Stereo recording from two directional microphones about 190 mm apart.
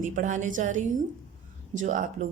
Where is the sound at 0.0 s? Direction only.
45° right (ahead or behind).